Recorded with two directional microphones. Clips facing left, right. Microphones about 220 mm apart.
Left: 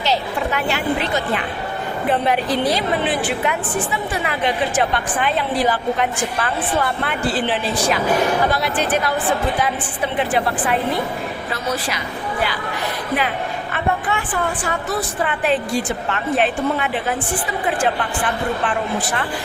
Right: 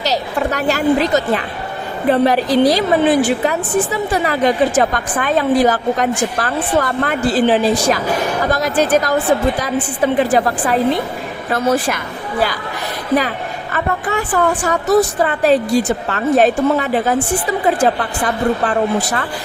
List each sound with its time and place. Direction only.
0.0 s a woman's voice: 40° right (ahead or behind)
11.5 s a woman's voice: 50° right (ahead or behind)
13.7 s a woman's voice: 40° right (ahead or behind)